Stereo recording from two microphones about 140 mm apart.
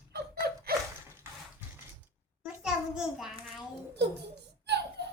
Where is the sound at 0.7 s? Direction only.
90° right.